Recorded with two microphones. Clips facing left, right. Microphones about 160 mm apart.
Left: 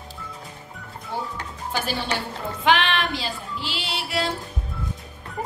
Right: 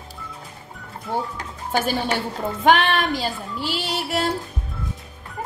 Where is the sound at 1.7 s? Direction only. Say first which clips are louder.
Right 5 dB; 50° right (ahead or behind).